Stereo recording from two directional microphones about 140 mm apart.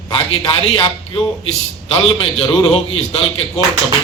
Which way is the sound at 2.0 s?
40° left (ahead or behind).